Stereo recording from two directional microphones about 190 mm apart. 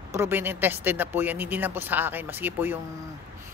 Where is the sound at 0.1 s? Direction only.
10° right (ahead or behind).